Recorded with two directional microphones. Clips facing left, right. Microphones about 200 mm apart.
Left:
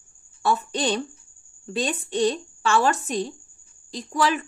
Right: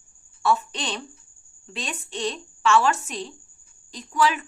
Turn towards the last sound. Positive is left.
turn(degrees=35)  # may be behind; listen again after turning